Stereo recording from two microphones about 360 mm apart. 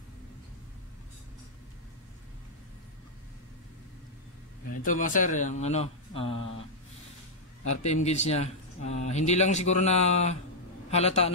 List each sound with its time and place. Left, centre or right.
4.8 s speech: left
7.6 s speech: centre